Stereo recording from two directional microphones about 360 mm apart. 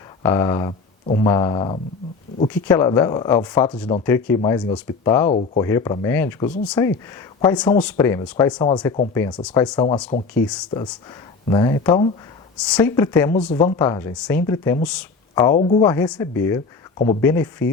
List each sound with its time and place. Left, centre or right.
0.2 s speech: centre
10.5 s speech: centre